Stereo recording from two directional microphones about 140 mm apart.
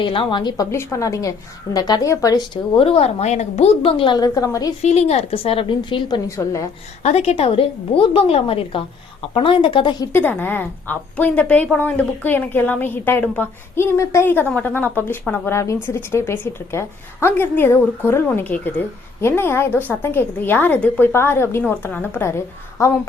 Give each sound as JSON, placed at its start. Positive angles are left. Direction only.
{"t": 0.0, "sound": "a woman's voice", "side_deg": 35}
{"t": 2.7, "sound": "a woman's voice", "side_deg": 45}
{"t": 4.8, "sound": "a woman's voice", "side_deg": 50}
{"t": 6.2, "sound": "a woman's voice", "side_deg": 20}
{"t": 7.0, "sound": "a woman's voice", "side_deg": 50}
{"t": 10.1, "sound": "speech", "side_deg": 15}